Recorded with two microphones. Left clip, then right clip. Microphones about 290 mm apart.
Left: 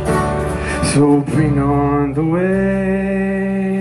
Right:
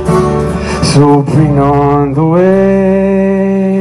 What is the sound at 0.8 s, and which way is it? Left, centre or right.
Mantra, right.